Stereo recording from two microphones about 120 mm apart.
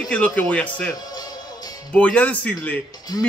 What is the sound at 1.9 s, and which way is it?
Speech, 10° left (ahead or behind).